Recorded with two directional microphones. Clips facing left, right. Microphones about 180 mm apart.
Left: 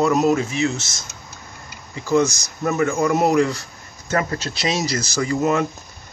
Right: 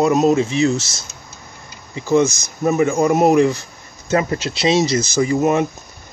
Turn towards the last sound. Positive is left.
turn(degrees=-20)  # may be behind; listen again after turning